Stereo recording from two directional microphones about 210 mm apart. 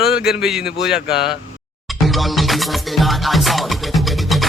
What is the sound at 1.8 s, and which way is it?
Music, centre (ahead or behind).